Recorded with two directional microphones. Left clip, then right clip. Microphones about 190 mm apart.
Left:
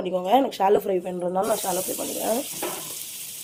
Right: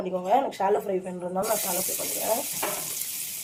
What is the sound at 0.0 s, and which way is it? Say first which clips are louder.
Speech: left 3 dB; 45° left (ahead or behind).